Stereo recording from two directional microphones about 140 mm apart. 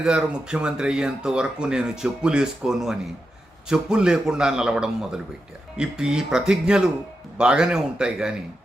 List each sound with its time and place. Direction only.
0.0 s speech: 5° right (ahead or behind)